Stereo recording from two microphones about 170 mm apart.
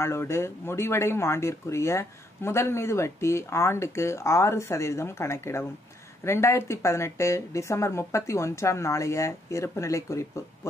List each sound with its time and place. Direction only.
0.0 s speech: 15° left (ahead or behind)